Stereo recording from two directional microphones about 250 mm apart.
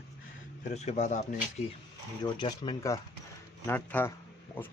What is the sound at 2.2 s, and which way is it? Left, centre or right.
Speech, centre.